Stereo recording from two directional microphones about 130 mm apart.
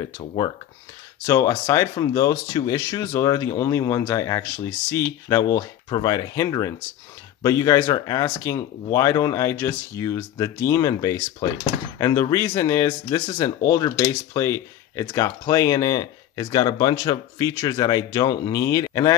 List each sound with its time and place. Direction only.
1.2 s speech: 25° left (ahead or behind)